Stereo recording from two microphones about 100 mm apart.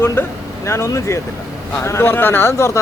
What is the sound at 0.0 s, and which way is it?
Speech, 25° left (ahead or behind).